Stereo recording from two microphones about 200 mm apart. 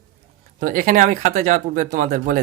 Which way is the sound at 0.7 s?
45° right (ahead or behind).